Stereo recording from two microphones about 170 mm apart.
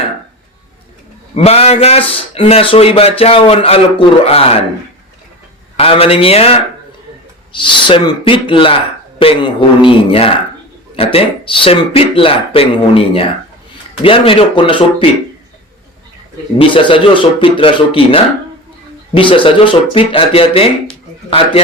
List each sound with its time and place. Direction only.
1.4 s speech: 35° left (ahead or behind)
5.7 s speech: 35° left (ahead or behind)
16.6 s speech: 30° left (ahead or behind)